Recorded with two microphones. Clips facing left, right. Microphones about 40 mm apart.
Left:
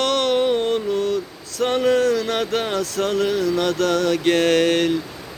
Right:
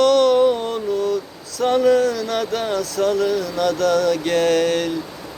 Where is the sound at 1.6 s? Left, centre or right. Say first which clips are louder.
Right 2 dB; left.